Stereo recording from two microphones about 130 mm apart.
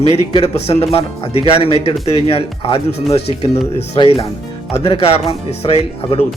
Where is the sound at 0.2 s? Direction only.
50° left (ahead or behind).